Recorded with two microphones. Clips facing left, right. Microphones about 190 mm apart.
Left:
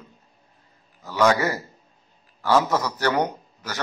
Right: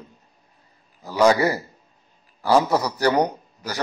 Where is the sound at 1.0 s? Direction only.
10° right (ahead or behind).